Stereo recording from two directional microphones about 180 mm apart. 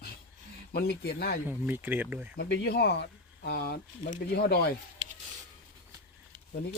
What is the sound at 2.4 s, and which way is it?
Speech, 70° left (ahead or behind).